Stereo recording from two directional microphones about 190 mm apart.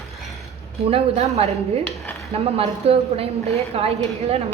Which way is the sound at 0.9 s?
35° right (ahead or behind).